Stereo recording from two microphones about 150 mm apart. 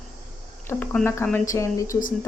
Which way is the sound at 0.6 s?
15° left (ahead or behind).